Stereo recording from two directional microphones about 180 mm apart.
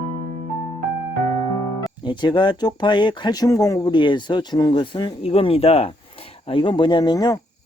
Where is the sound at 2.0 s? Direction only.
25° left (ahead or behind).